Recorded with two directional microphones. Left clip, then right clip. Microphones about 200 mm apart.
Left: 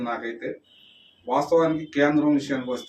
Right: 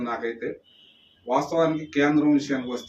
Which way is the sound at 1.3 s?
5° left (ahead or behind).